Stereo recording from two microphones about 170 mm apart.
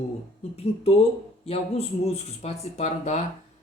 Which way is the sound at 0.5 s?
35° left (ahead or behind).